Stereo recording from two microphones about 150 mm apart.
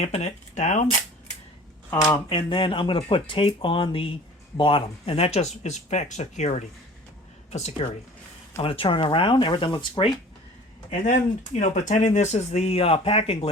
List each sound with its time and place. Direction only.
0.0 s speech: 45° left (ahead or behind)
2.3 s speech: 35° left (ahead or behind); by 6.5 s 50° left (ahead or behind)
7.5 s speech: 45° left (ahead or behind)
10.9 s speech: 55° left (ahead or behind)